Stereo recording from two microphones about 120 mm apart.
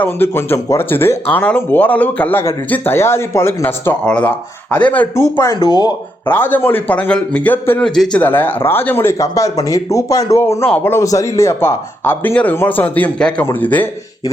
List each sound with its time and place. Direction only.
0.0 s speech: 20° left (ahead or behind)
5.6 s speech: 35° left (ahead or behind)
6.2 s speech: 15° left (ahead or behind)